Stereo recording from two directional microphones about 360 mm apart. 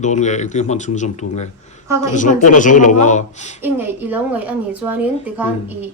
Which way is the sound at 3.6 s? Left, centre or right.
Centre.